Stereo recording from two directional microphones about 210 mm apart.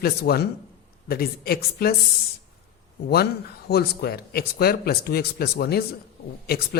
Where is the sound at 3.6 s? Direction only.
50° left (ahead or behind).